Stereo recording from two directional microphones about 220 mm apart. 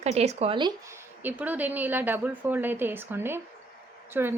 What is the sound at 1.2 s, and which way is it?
A woman's voice, 10° right (ahead or behind).